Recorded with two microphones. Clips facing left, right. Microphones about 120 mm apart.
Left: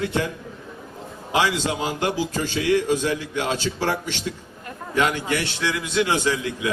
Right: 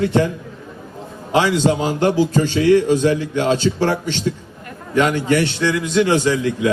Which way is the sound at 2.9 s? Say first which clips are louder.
Right 7 dB; 10° left (ahead or behind).